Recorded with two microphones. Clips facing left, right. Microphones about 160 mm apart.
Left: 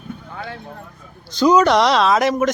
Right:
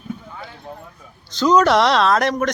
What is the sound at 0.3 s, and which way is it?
Clip-clop, 75° left (ahead or behind).